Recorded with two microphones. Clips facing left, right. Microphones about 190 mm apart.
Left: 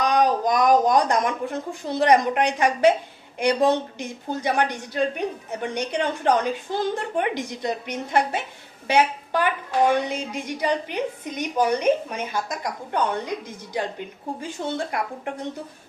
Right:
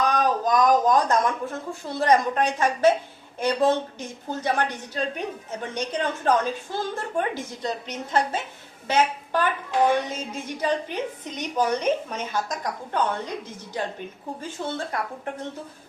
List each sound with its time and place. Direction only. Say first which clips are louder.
0.0 s a sound: left 2 dB; 15° left (ahead or behind)
0.7 s a woman's voice: left 1 dB; 15° left (ahead or behind)
14.4 s a woman's voice: left 2 dB; 15° left (ahead or behind)